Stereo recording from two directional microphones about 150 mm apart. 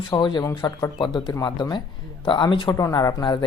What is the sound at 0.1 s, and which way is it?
Speech, 30° left (ahead or behind).